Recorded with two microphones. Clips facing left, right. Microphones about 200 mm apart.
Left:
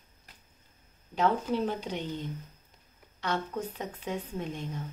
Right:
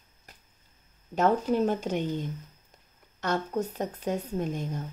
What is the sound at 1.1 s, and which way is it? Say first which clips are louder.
A woman's voice: right 4 dB; 45° right (ahead or behind).